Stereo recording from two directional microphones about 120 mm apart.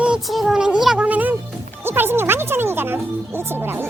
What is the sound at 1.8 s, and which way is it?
Speech, 20° right (ahead or behind).